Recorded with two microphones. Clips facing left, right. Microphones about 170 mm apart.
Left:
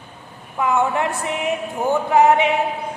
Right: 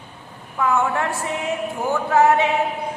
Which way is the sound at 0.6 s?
20° left (ahead or behind).